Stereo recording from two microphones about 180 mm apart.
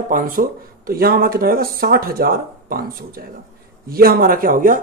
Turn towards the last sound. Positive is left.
turn(degrees=-50)  # may be behind; listen again after turning